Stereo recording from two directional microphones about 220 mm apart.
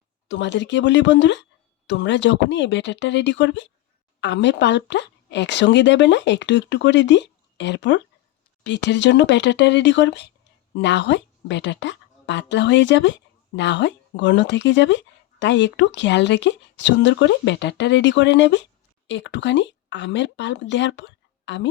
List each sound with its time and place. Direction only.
0.3 s a woman's voice: 55° left (ahead or behind)